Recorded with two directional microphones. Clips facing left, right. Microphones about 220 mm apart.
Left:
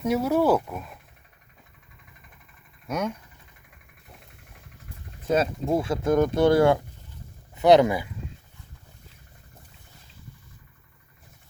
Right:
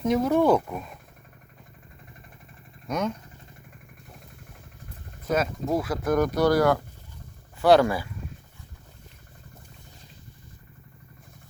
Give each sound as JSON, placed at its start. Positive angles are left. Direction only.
{"t": 0.0, "sound": "speech", "side_deg": 10}
{"t": 2.8, "sound": "speech", "side_deg": 10}
{"t": 5.3, "sound": "speech", "side_deg": 30}